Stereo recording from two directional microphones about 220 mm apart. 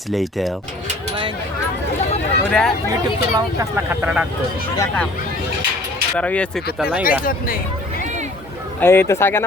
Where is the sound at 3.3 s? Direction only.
10° right (ahead or behind).